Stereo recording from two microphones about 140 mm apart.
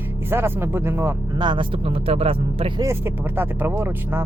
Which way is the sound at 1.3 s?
35° right (ahead or behind).